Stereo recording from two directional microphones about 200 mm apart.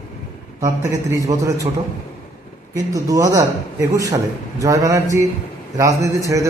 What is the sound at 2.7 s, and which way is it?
Speech, 15° right (ahead or behind).